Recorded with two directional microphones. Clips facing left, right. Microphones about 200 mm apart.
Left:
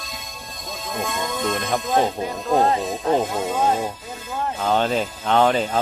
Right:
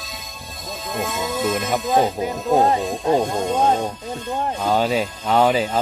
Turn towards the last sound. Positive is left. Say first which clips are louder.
# right 1 dB
turn(degrees=-10)  # may be behind; listen again after turning